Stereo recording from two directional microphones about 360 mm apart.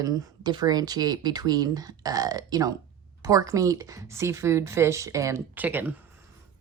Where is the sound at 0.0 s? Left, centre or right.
Centre.